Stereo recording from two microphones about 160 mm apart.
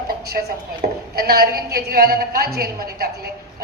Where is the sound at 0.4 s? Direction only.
65° right (ahead or behind).